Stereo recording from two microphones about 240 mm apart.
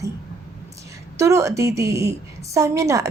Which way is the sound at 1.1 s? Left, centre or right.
Centre.